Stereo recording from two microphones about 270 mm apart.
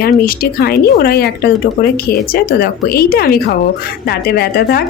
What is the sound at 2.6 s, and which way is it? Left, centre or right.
Speech, left.